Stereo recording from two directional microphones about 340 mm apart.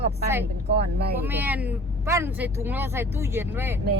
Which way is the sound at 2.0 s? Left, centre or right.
Centre.